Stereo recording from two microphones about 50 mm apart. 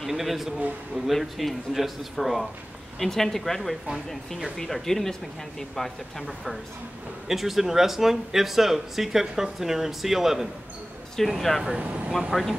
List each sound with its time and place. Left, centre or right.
0.0 s speech: centre
3.0 s speech: centre
11.8 s speech: right
12.3 s speech: centre